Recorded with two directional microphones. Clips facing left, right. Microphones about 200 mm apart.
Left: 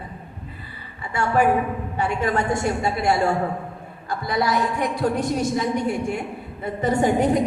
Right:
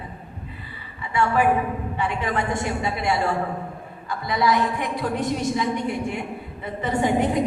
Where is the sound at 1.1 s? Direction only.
45° left (ahead or behind).